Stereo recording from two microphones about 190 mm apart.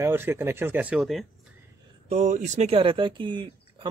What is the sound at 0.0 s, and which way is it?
Speech, 10° right (ahead or behind).